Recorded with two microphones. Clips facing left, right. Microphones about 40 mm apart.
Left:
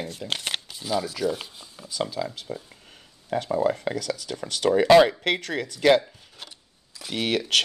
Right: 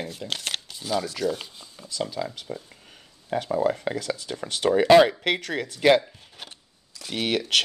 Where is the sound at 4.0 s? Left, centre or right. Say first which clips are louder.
Even; right.